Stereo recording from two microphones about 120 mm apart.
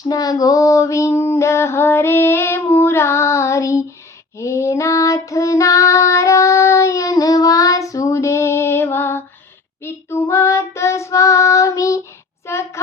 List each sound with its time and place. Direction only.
0.0 s female singing: 30° left (ahead or behind)
4.4 s child singing: 25° left (ahead or behind)